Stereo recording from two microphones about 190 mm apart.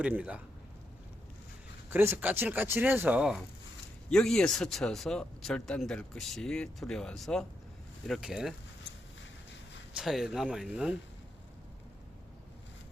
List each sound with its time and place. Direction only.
0.0 s speech: 5° right (ahead or behind)
1.9 s speech: 10° right (ahead or behind)
9.9 s speech: centre (ahead or behind)